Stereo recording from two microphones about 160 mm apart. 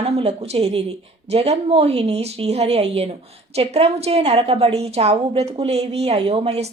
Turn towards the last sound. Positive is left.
turn(degrees=-40)  # may be behind; listen again after turning